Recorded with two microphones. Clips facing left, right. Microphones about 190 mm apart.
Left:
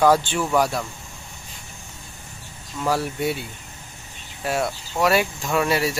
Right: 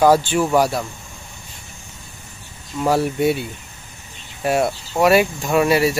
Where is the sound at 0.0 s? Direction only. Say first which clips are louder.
Right 4 dB; 10° right (ahead or behind).